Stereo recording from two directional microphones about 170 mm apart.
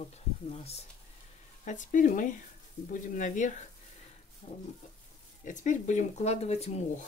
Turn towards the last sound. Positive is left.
turn(degrees=40)  # may be behind; listen again after turning